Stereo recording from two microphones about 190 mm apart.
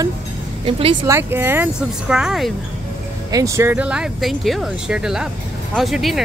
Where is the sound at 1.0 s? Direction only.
15° right (ahead or behind).